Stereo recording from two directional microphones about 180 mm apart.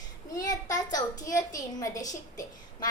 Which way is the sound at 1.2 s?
20° left (ahead or behind).